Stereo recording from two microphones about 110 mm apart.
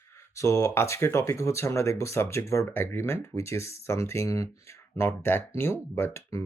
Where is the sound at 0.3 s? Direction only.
25° left (ahead or behind).